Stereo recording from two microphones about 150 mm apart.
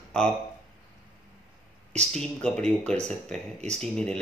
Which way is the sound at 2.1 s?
5° left (ahead or behind).